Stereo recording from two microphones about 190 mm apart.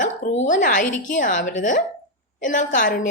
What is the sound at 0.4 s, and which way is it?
A woman's voice, 40° left (ahead or behind).